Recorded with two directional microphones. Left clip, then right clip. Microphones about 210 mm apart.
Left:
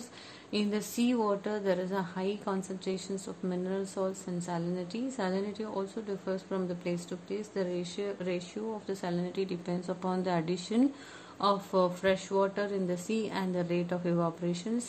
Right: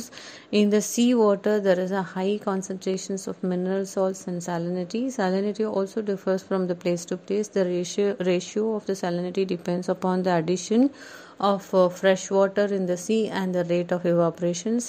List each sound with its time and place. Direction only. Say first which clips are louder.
0.5 s a woman's voice: right 12 dB; 35° right (ahead or behind)